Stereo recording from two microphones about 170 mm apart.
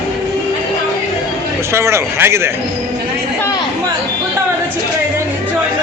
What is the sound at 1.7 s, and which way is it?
Speech, 15° right (ahead or behind).